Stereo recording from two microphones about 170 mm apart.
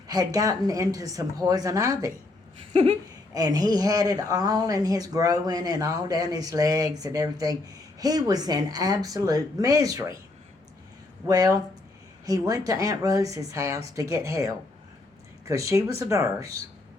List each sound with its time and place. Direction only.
0.1 s speech: 20° right (ahead or behind)
2.7 s speech: 35° right (ahead or behind)
3.3 s speech: 20° right (ahead or behind)
11.3 s speech: 20° right (ahead or behind)